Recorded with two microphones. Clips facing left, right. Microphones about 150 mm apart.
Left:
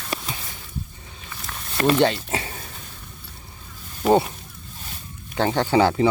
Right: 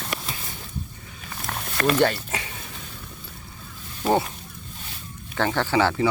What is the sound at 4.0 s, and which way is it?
Honk, 20° left (ahead or behind).